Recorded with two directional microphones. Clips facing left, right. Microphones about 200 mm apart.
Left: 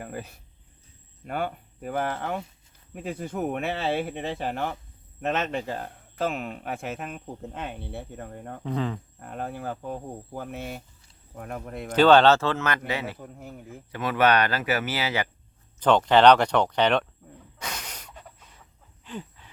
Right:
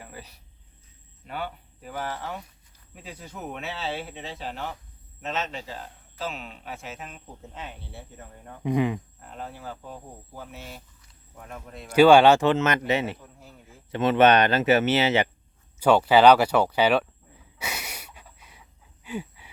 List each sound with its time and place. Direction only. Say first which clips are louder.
0.0 s cricket: left 7 dB; 50° left (ahead or behind)
1.2 s speech: left 4 dB; 50° left (ahead or behind)
8.6 s speech: right 5 dB; 15° right (ahead or behind)
9.2 s speech: left 5 dB; 55° left (ahead or behind)
11.9 s speech: right 2 dB; 10° right (ahead or behind)
13.2 s speech: left 8 dB; 55° left (ahead or behind)
13.9 s speech: right 4 dB; 25° right (ahead or behind)
15.8 s speech: right 1 dB; 10° right (ahead or behind)
17.6 s a sound: right 2 dB; 10° right (ahead or behind)